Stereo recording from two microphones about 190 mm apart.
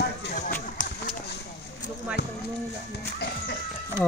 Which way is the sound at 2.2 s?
60° left (ahead or behind).